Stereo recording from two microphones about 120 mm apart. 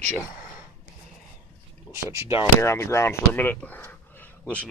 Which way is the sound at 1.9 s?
25° left (ahead or behind).